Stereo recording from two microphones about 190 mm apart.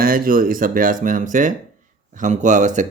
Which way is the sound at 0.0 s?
50° right (ahead or behind).